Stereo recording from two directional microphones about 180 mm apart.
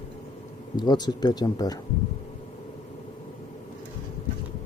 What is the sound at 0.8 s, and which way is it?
Speech, 25° left (ahead or behind).